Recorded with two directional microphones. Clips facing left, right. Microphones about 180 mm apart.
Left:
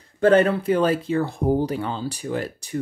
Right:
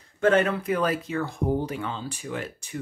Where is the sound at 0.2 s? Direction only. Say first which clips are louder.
Left 5 dB; 35° left (ahead or behind).